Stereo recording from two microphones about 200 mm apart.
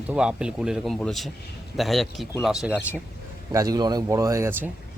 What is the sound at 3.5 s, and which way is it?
Speech, 20° right (ahead or behind).